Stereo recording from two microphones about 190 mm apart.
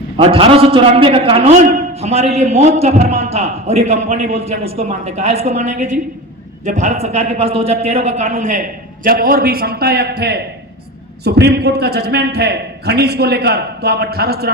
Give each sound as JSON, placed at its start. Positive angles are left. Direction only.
{"t": 0.2, "sound": "a man's voice", "side_deg": -30}